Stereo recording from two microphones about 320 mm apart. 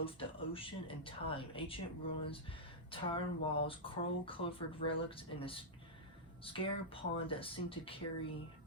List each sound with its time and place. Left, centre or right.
0.0 s speech: centre